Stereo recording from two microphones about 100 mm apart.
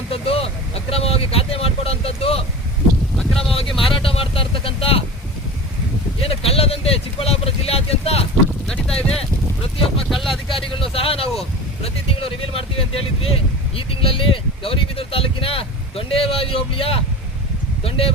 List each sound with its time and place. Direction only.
0.1 s speech: 70° left (ahead or behind)
3.8 s speech: 65° left (ahead or behind)
6.1 s speech: 75° left (ahead or behind)
8.6 s speech: 5° left (ahead or behind)
10.5 s speech: 60° left (ahead or behind)
10.9 s speech: 70° left (ahead or behind)